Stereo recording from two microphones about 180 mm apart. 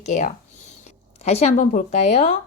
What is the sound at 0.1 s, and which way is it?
Speech, 45° left (ahead or behind).